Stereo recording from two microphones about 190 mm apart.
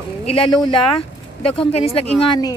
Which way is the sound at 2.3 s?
20° left (ahead or behind).